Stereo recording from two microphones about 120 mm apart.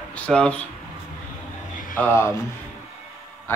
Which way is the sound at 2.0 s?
20° left (ahead or behind).